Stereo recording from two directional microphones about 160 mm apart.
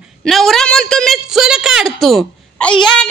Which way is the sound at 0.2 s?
Centre (ahead or behind).